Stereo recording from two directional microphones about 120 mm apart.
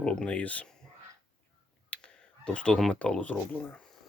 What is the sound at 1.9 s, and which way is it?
Speech, 10° left (ahead or behind).